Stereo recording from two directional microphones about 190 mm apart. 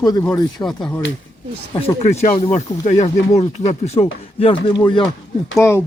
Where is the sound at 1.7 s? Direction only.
30° left (ahead or behind).